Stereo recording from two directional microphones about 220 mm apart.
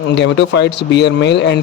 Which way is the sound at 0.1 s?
55° left (ahead or behind).